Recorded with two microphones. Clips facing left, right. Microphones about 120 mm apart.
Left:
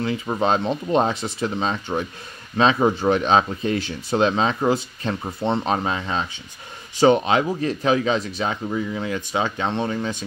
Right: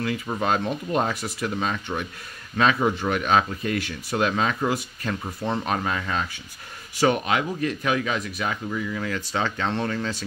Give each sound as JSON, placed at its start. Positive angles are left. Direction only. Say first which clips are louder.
{"t": 0.0, "sound": "speech", "louder": "left 4 dB", "side_deg": 25}